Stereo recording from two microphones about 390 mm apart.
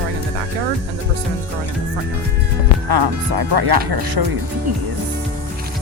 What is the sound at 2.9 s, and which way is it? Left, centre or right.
Speech, right.